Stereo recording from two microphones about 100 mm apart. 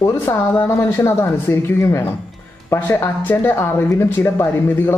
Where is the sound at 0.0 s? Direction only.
25° left (ahead or behind).